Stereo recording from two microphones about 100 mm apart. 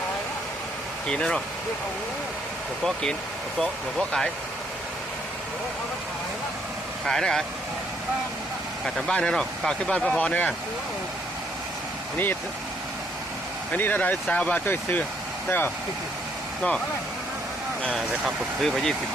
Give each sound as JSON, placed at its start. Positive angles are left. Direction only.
{"t": 1.0, "sound": "speech", "side_deg": 10}
{"t": 2.8, "sound": "speech", "side_deg": 5}
{"t": 7.0, "sound": "speech", "side_deg": 5}
{"t": 8.8, "sound": "speech", "side_deg": 5}
{"t": 13.7, "sound": "speech", "side_deg": 15}
{"t": 17.9, "sound": "speech", "side_deg": 0}